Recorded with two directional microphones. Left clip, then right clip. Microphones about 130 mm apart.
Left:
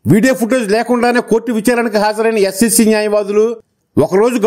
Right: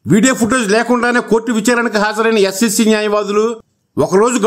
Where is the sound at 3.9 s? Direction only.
30° left (ahead or behind).